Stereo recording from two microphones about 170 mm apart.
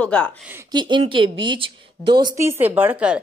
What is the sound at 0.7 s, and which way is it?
A woman's voice, 25° right (ahead or behind).